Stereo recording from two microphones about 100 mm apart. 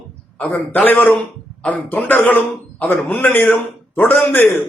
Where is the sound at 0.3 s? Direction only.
15° left (ahead or behind).